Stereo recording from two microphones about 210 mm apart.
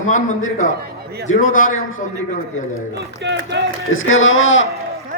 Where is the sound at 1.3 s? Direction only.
75° left (ahead or behind).